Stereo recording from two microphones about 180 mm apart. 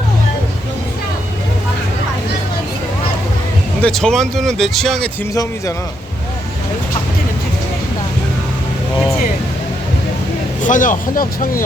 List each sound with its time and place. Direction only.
3.8 s speech: 5° left (ahead or behind)
5.3 s a man's voice: 20° left (ahead or behind)
10.6 s speech: 45° left (ahead or behind)